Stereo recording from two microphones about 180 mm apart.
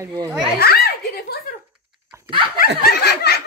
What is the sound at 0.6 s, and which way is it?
Giggle, 60° left (ahead or behind).